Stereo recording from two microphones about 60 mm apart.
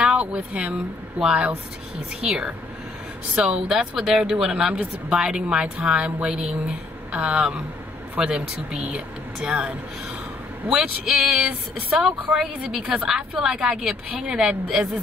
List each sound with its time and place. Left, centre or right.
0.0 s speech: centre
3.3 s speech: centre